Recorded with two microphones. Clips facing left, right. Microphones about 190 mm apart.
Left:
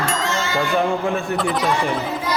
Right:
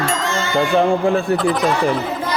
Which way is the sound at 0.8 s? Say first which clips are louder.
Right 6 dB; 30° right (ahead or behind).